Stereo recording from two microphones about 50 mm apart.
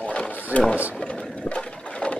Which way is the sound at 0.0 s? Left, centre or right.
Left.